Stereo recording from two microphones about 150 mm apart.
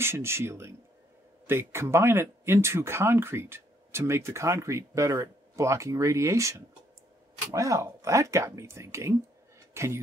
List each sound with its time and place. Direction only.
0.0 s speech: 15° right (ahead or behind)